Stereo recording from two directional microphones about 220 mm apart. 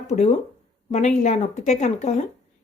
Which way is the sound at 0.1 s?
30° left (ahead or behind).